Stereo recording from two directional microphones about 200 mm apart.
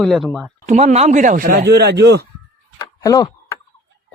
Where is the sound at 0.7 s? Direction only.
35° right (ahead or behind); by 2.3 s 55° right (ahead or behind).